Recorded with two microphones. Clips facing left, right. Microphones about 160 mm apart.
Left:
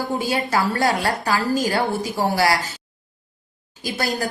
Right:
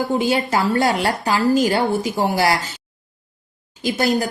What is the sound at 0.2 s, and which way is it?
A woman's voice, 25° right (ahead or behind).